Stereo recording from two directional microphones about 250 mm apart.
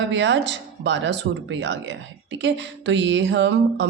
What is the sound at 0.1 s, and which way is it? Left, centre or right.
Speech, right.